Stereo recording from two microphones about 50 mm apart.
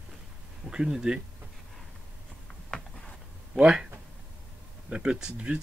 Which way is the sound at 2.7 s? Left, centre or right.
Centre.